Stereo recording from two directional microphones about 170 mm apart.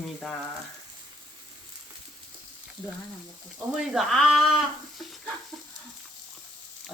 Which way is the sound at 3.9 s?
Centre (ahead or behind).